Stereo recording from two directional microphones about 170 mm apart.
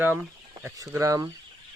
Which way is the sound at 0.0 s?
10° right (ahead or behind).